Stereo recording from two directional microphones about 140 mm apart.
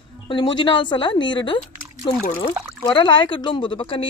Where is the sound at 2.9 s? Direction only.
35° left (ahead or behind).